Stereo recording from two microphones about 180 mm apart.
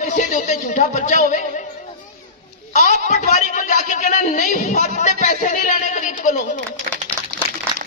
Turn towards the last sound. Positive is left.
turn(degrees=-25)  # may be behind; listen again after turning